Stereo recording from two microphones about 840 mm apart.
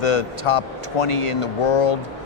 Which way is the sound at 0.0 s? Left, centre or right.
Left.